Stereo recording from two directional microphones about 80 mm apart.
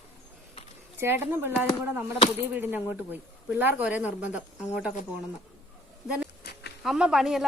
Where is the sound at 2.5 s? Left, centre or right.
Right.